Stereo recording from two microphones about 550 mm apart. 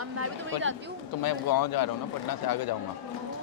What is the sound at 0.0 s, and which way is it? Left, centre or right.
Chatter, right.